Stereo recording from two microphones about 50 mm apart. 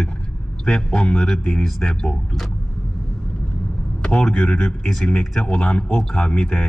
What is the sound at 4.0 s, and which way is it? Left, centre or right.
A man's voice, centre.